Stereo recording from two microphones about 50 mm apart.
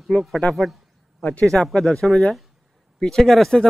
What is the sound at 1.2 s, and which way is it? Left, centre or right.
Speech, left.